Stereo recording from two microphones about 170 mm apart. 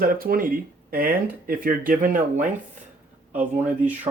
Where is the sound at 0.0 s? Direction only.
60° right (ahead or behind).